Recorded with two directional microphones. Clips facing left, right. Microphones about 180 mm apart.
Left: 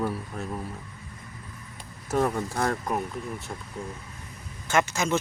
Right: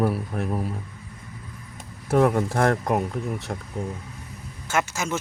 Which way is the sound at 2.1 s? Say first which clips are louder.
Right 6 dB; 60° right (ahead or behind).